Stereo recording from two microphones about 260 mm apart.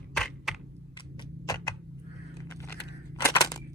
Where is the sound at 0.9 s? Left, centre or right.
Centre.